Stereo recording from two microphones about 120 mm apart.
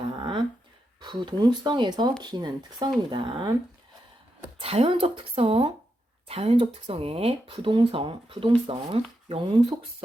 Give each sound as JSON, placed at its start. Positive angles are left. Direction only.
{"t": 0.2, "sound": "a sound", "side_deg": -40}
{"t": 1.0, "sound": "speech", "side_deg": -35}
{"t": 4.6, "sound": "speech", "side_deg": -55}